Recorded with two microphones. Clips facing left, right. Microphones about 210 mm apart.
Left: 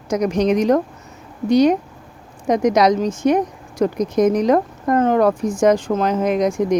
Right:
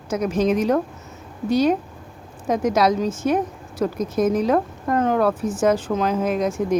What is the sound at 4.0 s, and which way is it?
Speech, 15° left (ahead or behind).